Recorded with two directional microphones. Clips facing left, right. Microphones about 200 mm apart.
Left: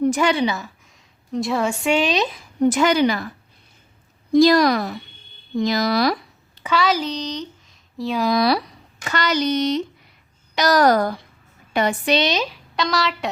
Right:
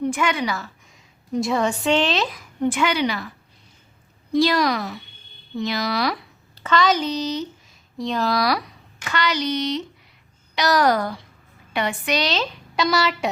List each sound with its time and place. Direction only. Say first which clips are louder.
0.0 s a woman's voice: left 5 dB; 40° left (ahead or behind)
1.3 s a woman's voice: even; centre (ahead or behind); by 2.4 s 20° left (ahead or behind)
2.6 s speech: left 5 dB; 40° left (ahead or behind)
4.4 s speech: left 5 dB; 45° left (ahead or behind)
6.6 s speech: right 1 dB; 10° left (ahead or behind)
7.9 s a woman's voice: left 2 dB; 5° left (ahead or behind)
8.3 s speech: left 5 dB; 25° left (ahead or behind)
9.0 s a woman's voice: left 3 dB; 45° left (ahead or behind)
12.1 s speech: left 2 dB; 20° left (ahead or behind)
12.7 s a child's voice: right 2 dB; centre (ahead or behind)